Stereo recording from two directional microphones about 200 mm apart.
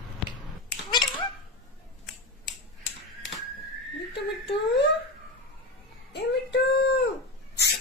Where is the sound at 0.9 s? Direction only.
20° left (ahead or behind).